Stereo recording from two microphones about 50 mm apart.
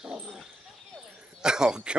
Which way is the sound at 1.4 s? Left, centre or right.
Centre.